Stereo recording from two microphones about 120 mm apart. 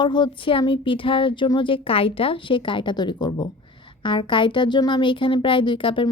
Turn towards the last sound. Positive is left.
turn(degrees=45)  # may be behind; listen again after turning